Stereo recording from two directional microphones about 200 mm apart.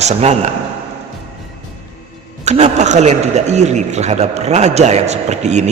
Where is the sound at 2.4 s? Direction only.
35° right (ahead or behind).